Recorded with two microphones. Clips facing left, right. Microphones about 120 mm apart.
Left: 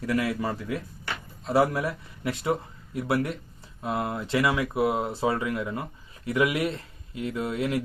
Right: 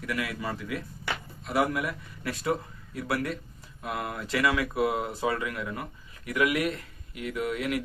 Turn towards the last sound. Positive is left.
turn(degrees=25)  # may be behind; listen again after turning